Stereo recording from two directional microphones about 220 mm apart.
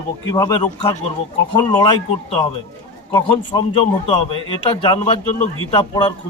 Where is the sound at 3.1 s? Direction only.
20° left (ahead or behind).